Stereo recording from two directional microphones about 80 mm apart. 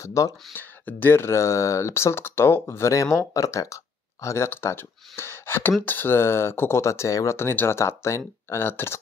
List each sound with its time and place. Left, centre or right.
0.0 s speech: left
0.6 s speech: left